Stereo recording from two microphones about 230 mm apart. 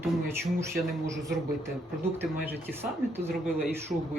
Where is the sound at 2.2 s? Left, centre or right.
Centre.